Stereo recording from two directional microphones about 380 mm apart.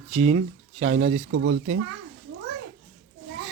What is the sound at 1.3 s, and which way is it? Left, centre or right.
Speech, right.